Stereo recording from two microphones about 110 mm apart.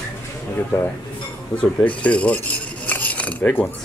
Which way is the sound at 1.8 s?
10° left (ahead or behind).